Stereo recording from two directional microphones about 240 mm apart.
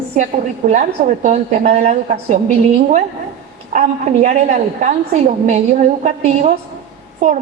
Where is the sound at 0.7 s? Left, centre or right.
Right.